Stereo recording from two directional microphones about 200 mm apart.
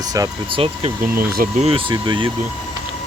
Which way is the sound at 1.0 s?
45° right (ahead or behind).